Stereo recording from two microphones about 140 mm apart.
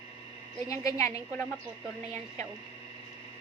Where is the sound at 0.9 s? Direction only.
20° left (ahead or behind).